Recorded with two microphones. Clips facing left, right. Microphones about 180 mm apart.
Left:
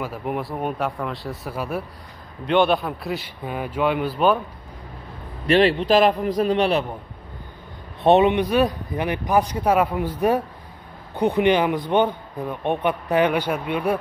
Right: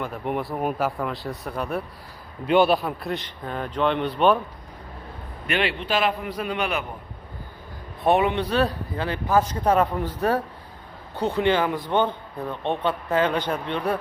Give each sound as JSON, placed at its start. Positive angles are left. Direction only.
{"t": 0.0, "sound": "a man's voice", "side_deg": 5}
{"t": 5.5, "sound": "a man's voice", "side_deg": 35}
{"t": 8.0, "sound": "a man's voice", "side_deg": 25}